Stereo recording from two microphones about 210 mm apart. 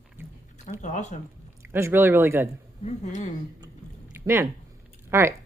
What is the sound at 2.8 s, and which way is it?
Speech, 35° left (ahead or behind).